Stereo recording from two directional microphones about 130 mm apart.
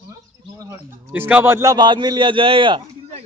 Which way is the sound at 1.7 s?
35° right (ahead or behind).